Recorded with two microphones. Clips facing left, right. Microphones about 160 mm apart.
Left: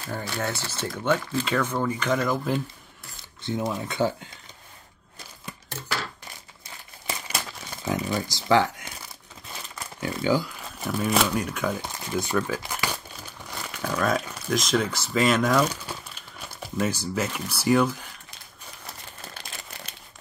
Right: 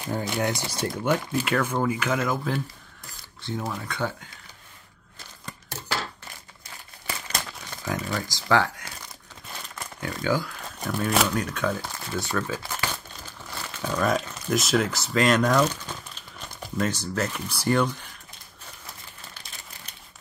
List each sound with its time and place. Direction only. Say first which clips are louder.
0.0 s speech: right 3 dB; 15° right (ahead or behind)
3.5 s speech: left 4 dB; 20° left (ahead or behind)
7.2 s crumpling: even; 15° left (ahead or behind)
10.2 s speech: left 2 dB; 15° left (ahead or behind)
10.8 s speech: even; 5° left (ahead or behind)
13.5 s crumpling: even; 10° left (ahead or behind)
14.0 s speech: right 1 dB; centre (ahead or behind)